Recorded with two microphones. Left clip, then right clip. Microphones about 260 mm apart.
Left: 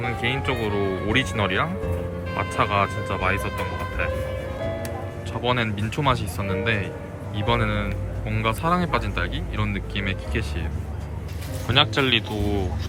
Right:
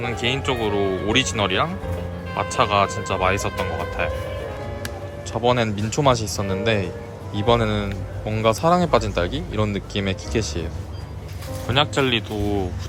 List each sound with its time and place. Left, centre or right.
0.0 s a man's voice: centre
5.4 s a man's voice: centre
11.7 s a man's voice: centre